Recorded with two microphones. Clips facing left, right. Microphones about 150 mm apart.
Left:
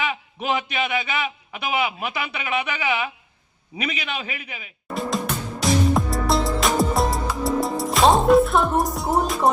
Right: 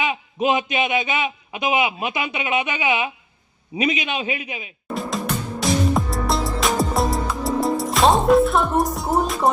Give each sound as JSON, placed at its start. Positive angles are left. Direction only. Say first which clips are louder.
{"t": 0.0, "sound": "a man's voice", "louder": "right 5 dB", "side_deg": -20}
{"t": 4.9, "sound": "music", "louder": "even", "side_deg": 0}